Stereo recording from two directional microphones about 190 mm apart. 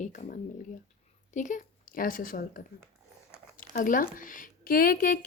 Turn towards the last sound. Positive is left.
turn(degrees=45)  # may be behind; listen again after turning